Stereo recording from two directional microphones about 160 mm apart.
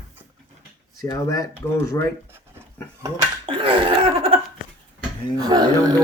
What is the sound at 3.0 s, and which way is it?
Speech, 30° right (ahead or behind).